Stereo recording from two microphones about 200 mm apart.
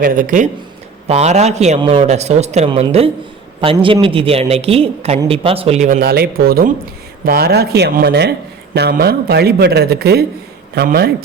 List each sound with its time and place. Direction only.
0.0 s a man's voice: 40° right (ahead or behind)